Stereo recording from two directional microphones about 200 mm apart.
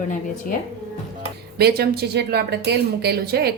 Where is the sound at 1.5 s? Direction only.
50° right (ahead or behind).